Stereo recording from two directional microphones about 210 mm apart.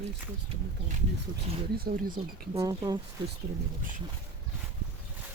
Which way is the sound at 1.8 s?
45° right (ahead or behind).